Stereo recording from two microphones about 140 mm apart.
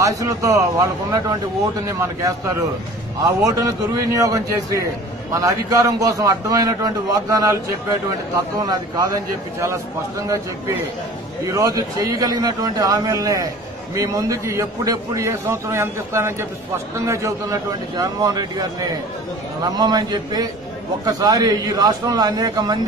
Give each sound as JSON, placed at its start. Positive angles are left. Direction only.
{"t": 0.0, "sound": "a man's voice", "side_deg": -25}
{"t": 8.5, "sound": "a man's voice", "side_deg": -25}
{"t": 11.4, "sound": "a man's voice", "side_deg": -20}